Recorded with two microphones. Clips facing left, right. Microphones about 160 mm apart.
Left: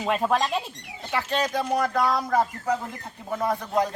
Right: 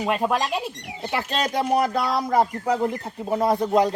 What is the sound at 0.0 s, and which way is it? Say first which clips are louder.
Speech: right 1 dB; 10° right (ahead or behind).